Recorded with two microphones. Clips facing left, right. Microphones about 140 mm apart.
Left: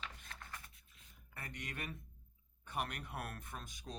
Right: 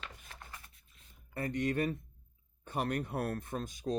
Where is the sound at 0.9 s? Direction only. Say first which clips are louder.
Right 14 dB; 35° right (ahead or behind).